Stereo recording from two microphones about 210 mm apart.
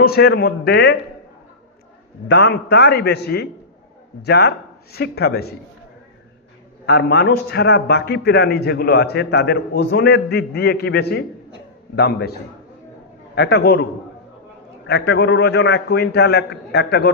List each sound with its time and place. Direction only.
0.0 s a man's voice: 50° left (ahead or behind)
2.2 s a man's voice: 55° left (ahead or behind)
6.8 s a man's voice: 50° left (ahead or behind)
13.3 s a man's voice: 50° left (ahead or behind)
14.8 s a man's voice: 55° left (ahead or behind)